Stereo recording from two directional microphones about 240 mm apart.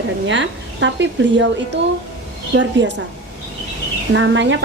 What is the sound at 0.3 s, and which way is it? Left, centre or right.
A woman's voice, right.